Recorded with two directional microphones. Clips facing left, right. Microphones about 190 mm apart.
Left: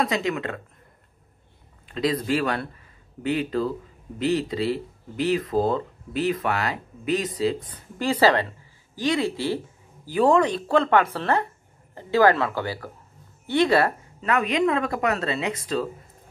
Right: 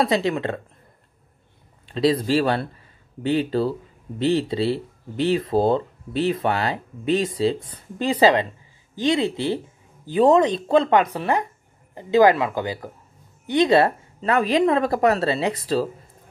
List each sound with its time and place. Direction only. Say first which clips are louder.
0.0 s speech: right 4 dB; 30° right (ahead or behind)
1.9 s speech: right 4 dB; 30° right (ahead or behind)